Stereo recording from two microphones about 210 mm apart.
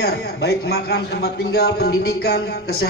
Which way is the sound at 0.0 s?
50° left (ahead or behind).